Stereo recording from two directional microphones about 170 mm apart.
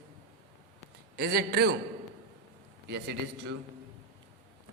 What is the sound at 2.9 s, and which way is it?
Speech, 80° right.